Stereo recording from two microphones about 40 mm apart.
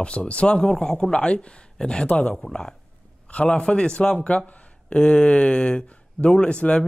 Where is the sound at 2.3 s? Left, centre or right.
Centre.